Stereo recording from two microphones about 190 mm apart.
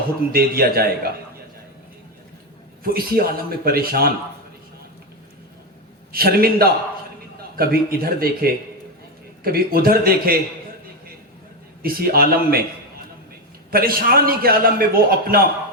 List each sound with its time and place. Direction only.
0.3 s a man's voice: 50° right (ahead or behind)
2.8 s a man's voice: 50° right (ahead or behind)
6.1 s a man's voice: 50° right (ahead or behind)
11.8 s a man's voice: 50° right (ahead or behind)
13.7 s a man's voice: 50° right (ahead or behind)